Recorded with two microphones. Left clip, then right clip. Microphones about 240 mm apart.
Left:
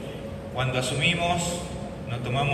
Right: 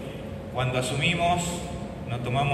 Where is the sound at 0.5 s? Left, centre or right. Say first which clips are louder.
Even; right.